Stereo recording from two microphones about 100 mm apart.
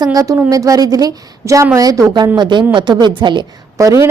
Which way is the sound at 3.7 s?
35° right (ahead or behind).